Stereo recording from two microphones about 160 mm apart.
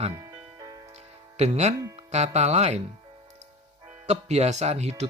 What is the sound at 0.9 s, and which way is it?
Music, 45° right (ahead or behind).